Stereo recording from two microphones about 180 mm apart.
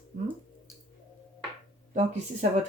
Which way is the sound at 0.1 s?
50° right (ahead or behind).